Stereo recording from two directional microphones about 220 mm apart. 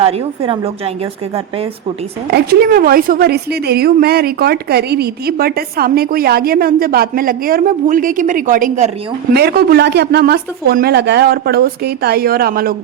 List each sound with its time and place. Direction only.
2.3 s a woman's voice: 45° right (ahead or behind)
9.3 s a woman's voice: 45° right (ahead or behind)